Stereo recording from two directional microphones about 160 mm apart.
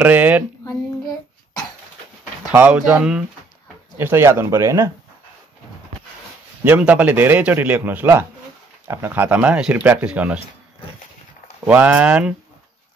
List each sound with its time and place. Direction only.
0.0 s a sound: 10° right (ahead or behind)
0.7 s child singing: 25° left (ahead or behind)
2.5 s a man's voice: 10° right (ahead or behind)
6.6 s a man's voice: 10° right (ahead or behind)
11.6 s a man's voice: 10° right (ahead or behind)